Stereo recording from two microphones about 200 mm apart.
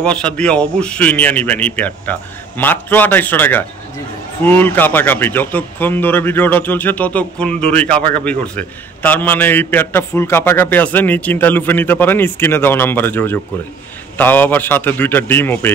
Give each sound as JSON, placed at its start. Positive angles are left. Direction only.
{"t": 0.0, "sound": "speech", "side_deg": 5}